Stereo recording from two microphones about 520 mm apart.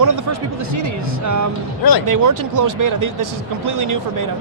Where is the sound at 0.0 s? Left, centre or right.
Right.